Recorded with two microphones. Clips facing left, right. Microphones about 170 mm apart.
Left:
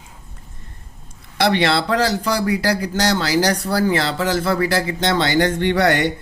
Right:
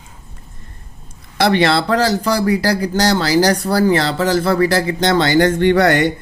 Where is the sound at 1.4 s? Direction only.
45° right (ahead or behind).